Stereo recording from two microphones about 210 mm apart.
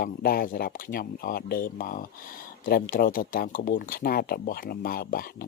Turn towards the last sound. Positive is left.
turn(degrees=45)  # may be behind; listen again after turning